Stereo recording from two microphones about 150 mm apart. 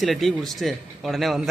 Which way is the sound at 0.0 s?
Centre (ahead or behind).